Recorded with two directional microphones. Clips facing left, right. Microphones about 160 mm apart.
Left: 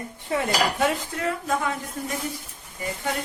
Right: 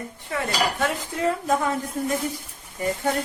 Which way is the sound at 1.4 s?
40° right (ahead or behind).